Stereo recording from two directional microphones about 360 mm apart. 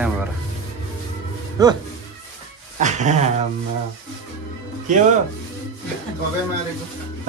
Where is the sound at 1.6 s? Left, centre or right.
Centre.